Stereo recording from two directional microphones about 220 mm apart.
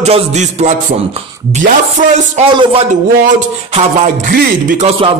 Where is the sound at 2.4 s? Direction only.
25° right (ahead or behind).